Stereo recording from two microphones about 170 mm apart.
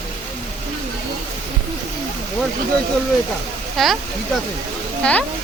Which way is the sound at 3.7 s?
Centre (ahead or behind).